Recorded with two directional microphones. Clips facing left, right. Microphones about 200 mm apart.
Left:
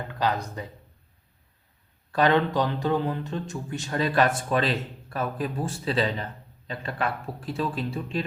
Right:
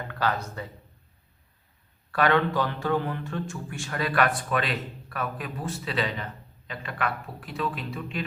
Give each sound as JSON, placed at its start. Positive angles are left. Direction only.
{"t": 0.2, "sound": "speech", "side_deg": 15}
{"t": 2.1, "sound": "a man's voice", "side_deg": 20}